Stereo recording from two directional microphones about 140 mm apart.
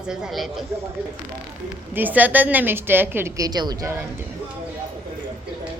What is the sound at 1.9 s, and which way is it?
A woman's voice, 10° right (ahead or behind).